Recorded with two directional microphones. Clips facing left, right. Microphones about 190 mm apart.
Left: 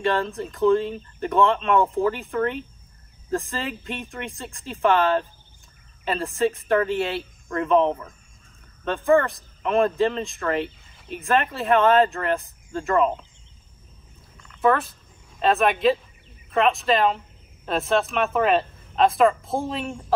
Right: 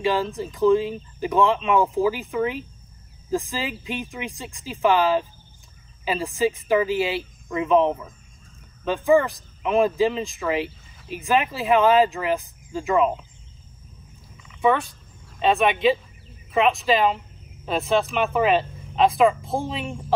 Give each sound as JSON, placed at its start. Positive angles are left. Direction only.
{"t": 0.0, "sound": "a man's voice", "side_deg": 0}
{"t": 14.3, "sound": "a sound", "side_deg": -5}
{"t": 16.5, "sound": "a man's voice", "side_deg": 0}